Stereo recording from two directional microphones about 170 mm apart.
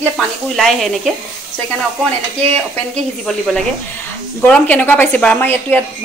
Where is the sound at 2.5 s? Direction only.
5° left (ahead or behind).